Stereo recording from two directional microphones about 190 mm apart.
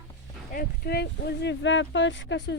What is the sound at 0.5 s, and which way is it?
Speech, 55° left (ahead or behind).